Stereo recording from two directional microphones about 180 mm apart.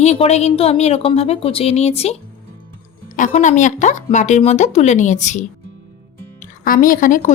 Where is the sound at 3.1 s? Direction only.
45° left (ahead or behind).